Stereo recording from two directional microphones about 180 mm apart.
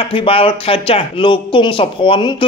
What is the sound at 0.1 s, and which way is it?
Speech, 30° left (ahead or behind).